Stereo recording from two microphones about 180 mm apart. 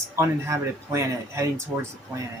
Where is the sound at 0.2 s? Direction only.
15° right (ahead or behind).